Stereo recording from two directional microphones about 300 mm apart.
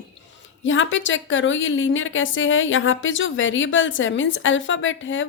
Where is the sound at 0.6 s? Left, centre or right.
Left.